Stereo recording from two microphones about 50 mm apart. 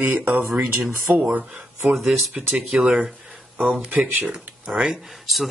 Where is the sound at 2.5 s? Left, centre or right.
Right.